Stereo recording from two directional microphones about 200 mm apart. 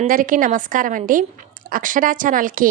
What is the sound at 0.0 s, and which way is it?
A woman's voice, 45° right (ahead or behind).